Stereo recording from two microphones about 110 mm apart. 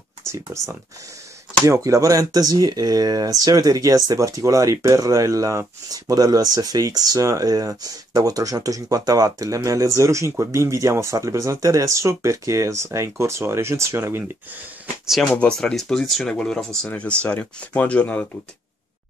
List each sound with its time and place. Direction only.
0.3 s speech: 25° right (ahead or behind)
15.0 s speech: centre (ahead or behind)